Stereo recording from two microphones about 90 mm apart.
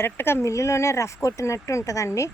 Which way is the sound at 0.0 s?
25° left (ahead or behind).